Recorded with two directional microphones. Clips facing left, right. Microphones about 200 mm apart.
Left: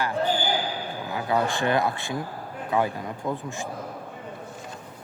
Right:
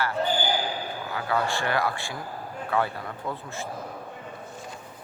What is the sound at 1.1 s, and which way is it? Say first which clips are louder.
Speech: left 2 dB; 20° left (ahead or behind).